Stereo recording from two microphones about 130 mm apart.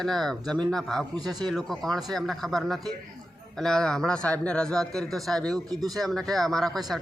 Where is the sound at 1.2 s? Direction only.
30° right (ahead or behind).